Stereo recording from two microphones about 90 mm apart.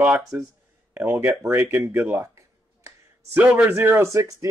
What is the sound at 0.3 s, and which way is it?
Speech, 25° right (ahead or behind).